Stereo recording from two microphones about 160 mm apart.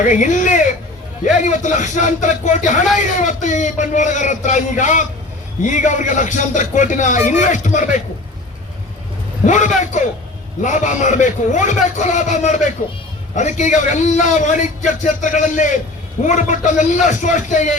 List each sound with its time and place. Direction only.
0.0 s a man's voice: 50° left (ahead or behind)
9.5 s a man's voice: 50° left (ahead or behind)